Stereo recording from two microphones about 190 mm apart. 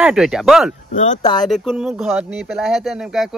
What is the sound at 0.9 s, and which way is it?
Speech, 40° left (ahead or behind).